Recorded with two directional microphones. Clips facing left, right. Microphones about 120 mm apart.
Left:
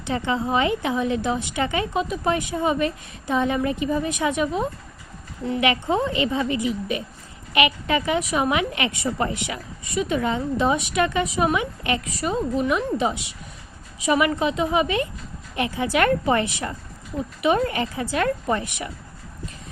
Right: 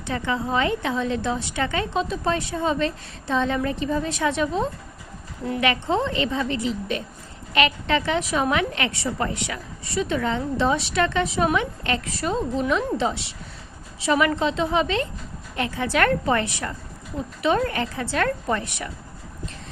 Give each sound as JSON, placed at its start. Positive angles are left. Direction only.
{"t": 0.1, "sound": "a woman's voice", "side_deg": 20}